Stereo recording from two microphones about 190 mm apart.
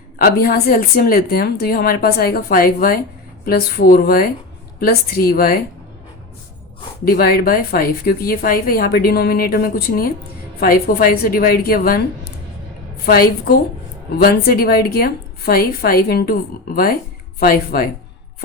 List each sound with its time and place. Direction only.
0.2 s a woman's voice: 55° left (ahead or behind)
7.1 s a woman's voice: 55° left (ahead or behind)
13.1 s a woman's voice: 50° left (ahead or behind)